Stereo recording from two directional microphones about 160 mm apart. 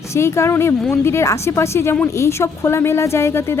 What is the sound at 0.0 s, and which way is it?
Speech, 15° left (ahead or behind).